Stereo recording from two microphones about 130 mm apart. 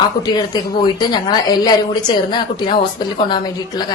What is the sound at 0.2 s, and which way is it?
A woman's voice, 35° left (ahead or behind).